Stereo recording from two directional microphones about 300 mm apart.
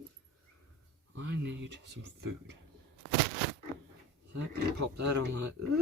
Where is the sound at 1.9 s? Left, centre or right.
Right.